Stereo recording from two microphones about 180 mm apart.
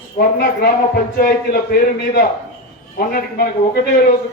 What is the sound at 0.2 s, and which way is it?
Speech, 60° left (ahead or behind).